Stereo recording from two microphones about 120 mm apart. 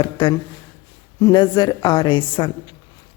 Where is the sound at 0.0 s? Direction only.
40° left (ahead or behind).